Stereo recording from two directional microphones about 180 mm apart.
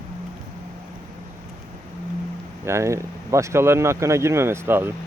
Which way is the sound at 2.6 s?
15° right (ahead or behind).